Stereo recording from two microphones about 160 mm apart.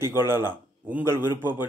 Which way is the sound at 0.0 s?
15° right (ahead or behind).